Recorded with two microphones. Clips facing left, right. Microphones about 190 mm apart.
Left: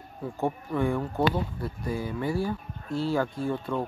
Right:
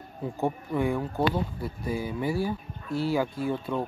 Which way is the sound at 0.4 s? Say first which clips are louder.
Even; 10° right (ahead or behind).